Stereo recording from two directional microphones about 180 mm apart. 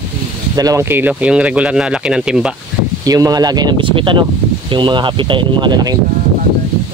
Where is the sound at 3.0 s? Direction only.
20° right (ahead or behind).